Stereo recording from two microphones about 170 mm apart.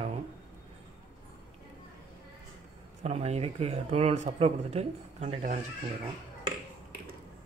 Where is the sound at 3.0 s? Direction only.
40° right (ahead or behind).